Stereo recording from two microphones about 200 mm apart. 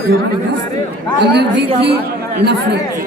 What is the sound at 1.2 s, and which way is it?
A woman's voice, 55° right (ahead or behind).